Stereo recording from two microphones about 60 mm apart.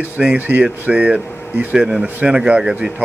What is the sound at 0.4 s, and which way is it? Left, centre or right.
Speech, right.